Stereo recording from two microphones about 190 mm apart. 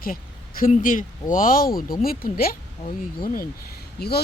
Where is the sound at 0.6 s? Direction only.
45° left (ahead or behind).